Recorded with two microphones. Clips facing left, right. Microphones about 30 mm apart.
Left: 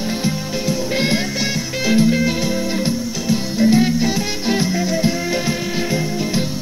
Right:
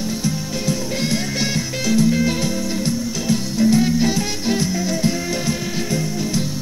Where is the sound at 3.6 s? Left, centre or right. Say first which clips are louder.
Left 1 dB; left.